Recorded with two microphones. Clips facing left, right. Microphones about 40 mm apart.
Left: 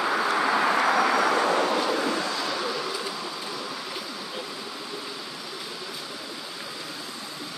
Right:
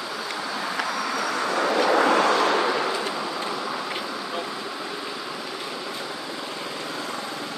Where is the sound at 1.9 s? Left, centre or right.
Right.